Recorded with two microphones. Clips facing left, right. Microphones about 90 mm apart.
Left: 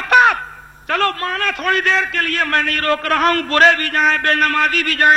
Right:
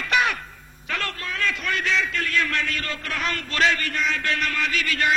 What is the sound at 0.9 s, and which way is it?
A man's voice, 55° left (ahead or behind).